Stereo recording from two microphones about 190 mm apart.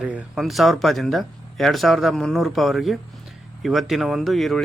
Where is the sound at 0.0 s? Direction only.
5° right (ahead or behind).